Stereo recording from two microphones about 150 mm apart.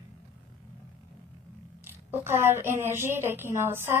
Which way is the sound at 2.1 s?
15° right (ahead or behind).